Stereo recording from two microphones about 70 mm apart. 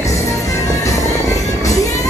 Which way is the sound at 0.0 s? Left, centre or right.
Left.